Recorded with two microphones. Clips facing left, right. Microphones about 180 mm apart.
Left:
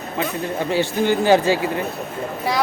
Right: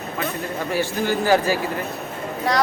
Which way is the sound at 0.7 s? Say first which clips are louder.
Left 3 dB; 25° left (ahead or behind).